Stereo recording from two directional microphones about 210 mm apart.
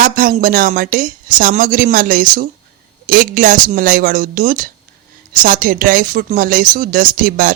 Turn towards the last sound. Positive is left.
turn(degrees=-40)  # may be behind; listen again after turning